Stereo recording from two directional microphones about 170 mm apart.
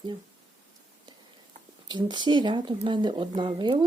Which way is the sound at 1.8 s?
25° right (ahead or behind).